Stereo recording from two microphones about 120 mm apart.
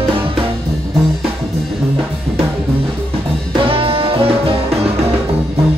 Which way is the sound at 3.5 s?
50° right (ahead or behind).